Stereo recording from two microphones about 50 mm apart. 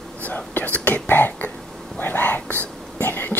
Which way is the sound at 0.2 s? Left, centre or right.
Left.